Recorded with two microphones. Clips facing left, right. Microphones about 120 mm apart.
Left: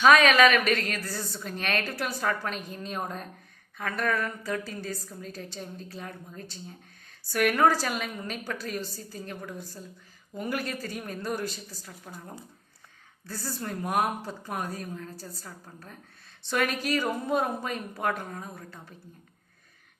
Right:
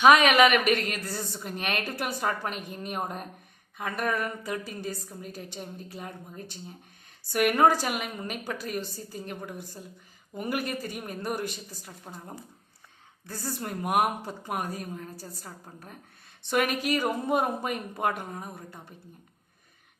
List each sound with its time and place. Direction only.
0.0 s a woman's voice: 15° right (ahead or behind)